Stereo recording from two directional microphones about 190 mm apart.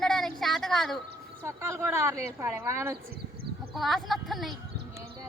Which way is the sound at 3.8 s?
Centre (ahead or behind).